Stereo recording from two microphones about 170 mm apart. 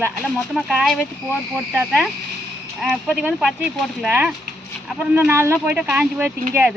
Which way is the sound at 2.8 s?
Centre (ahead or behind).